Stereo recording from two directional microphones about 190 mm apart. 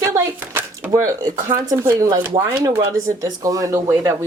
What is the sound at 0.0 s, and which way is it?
Speech, 15° right (ahead or behind).